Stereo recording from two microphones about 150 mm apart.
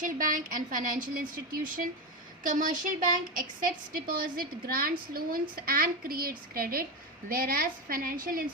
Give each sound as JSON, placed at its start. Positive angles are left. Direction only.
{"t": 0.0, "sound": "a woman's voice", "side_deg": -65}